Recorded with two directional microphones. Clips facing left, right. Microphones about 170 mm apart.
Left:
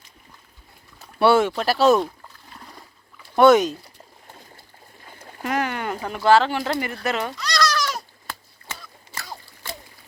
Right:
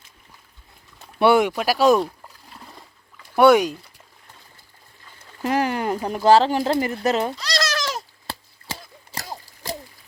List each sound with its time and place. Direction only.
1.2 s a sound: 15° right (ahead or behind)
3.3 s speech: 10° right (ahead or behind)
5.4 s bird: 35° right (ahead or behind)